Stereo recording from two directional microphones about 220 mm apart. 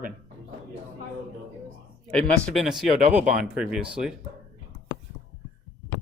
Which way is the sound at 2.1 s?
5° left (ahead or behind).